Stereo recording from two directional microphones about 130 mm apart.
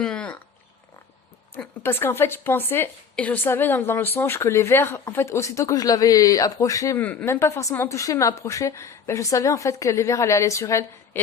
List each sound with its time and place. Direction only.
0.0 s a sound: 10° left (ahead or behind)
1.5 s a woman's voice: 15° left (ahead or behind)
7.0 s a woman's voice: 10° left (ahead or behind)